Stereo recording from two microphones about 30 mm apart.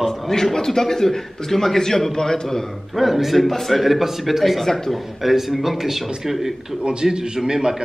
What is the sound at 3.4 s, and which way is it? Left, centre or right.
Speech, centre.